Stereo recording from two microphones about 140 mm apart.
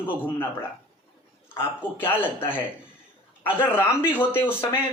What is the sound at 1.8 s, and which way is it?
Speech, 15° left (ahead or behind).